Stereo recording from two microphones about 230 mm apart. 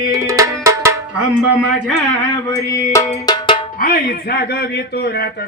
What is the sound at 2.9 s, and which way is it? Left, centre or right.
Music, centre.